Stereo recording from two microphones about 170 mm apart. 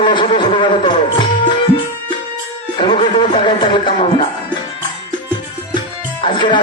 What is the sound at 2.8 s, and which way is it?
A man's voice, 30° left (ahead or behind).